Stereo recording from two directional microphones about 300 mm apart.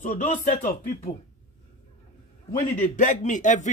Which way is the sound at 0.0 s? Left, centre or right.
Left.